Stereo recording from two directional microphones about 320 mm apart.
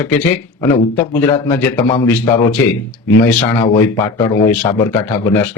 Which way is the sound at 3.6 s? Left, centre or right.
Centre.